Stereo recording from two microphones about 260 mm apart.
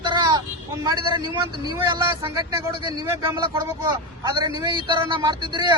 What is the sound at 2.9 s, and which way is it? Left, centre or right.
Speech, centre.